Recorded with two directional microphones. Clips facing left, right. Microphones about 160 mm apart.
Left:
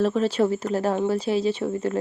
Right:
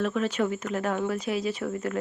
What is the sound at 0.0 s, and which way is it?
Speech, 30° left (ahead or behind).